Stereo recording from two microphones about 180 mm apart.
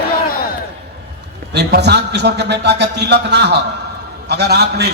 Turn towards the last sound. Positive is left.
turn(degrees=-65)  # may be behind; listen again after turning